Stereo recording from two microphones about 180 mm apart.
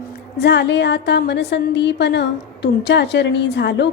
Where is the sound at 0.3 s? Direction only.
70° left (ahead or behind).